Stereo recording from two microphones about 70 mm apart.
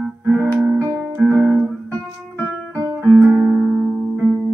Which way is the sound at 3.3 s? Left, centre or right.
Centre.